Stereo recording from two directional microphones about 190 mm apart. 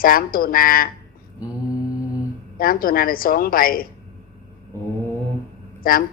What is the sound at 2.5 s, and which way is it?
Speech, 50° left (ahead or behind).